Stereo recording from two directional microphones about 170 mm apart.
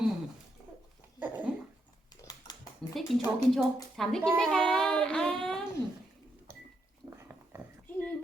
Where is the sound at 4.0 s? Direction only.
Centre (ahead or behind).